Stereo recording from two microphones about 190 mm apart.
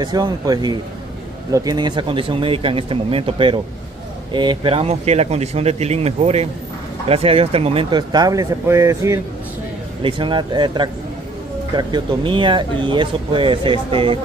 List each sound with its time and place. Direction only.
0.0 s speech: 20° right (ahead or behind)